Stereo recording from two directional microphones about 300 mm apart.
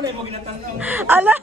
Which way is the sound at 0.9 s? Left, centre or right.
Centre.